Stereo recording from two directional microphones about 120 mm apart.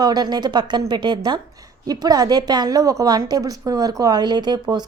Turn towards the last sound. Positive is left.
turn(degrees=-35)  # may be behind; listen again after turning